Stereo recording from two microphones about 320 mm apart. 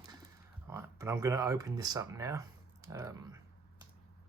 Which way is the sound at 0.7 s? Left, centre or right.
Centre.